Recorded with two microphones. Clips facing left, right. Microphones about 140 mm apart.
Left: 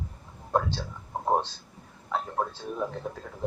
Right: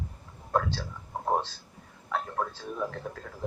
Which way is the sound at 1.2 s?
20° left (ahead or behind).